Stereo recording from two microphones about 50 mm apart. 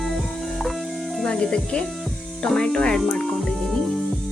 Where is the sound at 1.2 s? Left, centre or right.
Centre.